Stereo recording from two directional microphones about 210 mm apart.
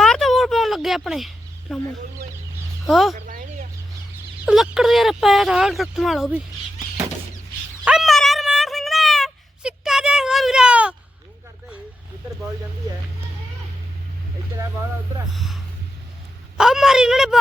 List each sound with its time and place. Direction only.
0.0 s a sound: centre (ahead or behind)
1.7 s speech: centre (ahead or behind)
3.2 s chicken: 40° right (ahead or behind)
4.4 s speech: centre (ahead or behind)
7.9 s a sound: centre (ahead or behind)
16.6 s speech: centre (ahead or behind)